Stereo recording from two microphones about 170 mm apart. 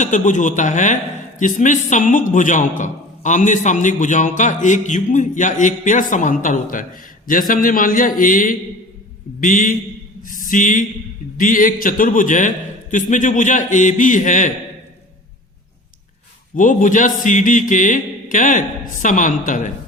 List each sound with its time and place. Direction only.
0.0 s a man's voice: 45° left (ahead or behind)
16.6 s a man's voice: 50° left (ahead or behind)